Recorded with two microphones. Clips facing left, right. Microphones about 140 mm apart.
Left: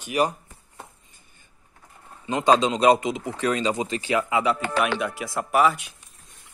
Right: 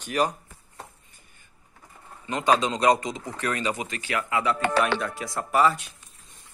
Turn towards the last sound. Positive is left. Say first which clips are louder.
# left 1 dB
turn(degrees=5)  # may be behind; listen again after turning